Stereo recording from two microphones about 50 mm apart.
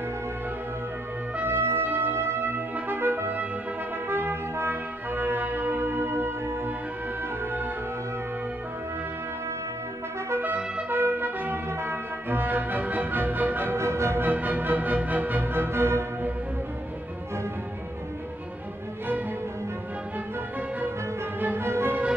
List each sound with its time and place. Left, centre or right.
1.4 s brass instrument: right
10.9 s trumpet: right
11.7 s music: right
13.7 s music: right
14.2 s music: right
21.4 s music: right